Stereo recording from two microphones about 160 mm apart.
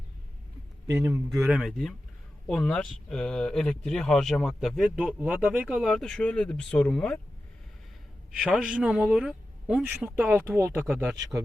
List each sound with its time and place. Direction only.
0.9 s a man's voice: 15° right (ahead or behind)
1.4 s speech: centre (ahead or behind)
8.3 s a man's voice: 5° right (ahead or behind)